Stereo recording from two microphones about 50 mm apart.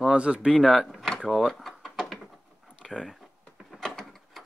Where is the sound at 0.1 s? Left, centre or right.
Right.